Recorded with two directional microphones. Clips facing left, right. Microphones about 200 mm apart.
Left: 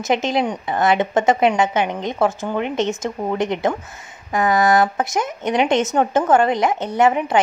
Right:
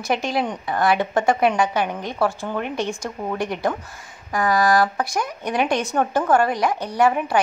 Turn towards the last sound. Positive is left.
turn(degrees=20)  # may be behind; listen again after turning